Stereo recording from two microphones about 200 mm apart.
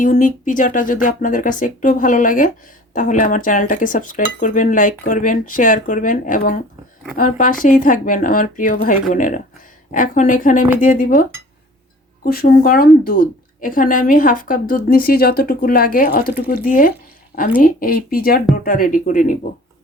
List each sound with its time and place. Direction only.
0.0 s cutlery: 40° left (ahead or behind)
7.2 s a woman's voice: 40° left (ahead or behind)
9.9 s cutlery: 40° left (ahead or behind)
10.8 s a woman's voice: 45° left (ahead or behind)